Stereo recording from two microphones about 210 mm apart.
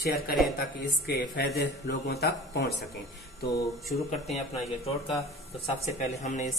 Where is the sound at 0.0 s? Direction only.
45° left (ahead or behind).